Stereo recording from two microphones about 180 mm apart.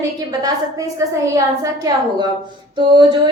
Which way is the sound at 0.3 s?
20° right (ahead or behind).